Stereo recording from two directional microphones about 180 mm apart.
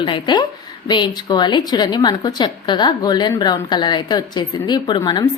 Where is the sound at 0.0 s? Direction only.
25° left (ahead or behind).